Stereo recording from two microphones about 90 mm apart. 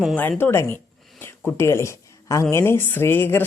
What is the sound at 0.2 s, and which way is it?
Speech, 20° left (ahead or behind).